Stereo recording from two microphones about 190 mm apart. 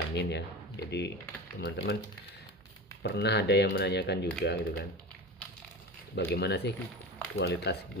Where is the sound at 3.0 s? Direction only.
60° left (ahead or behind).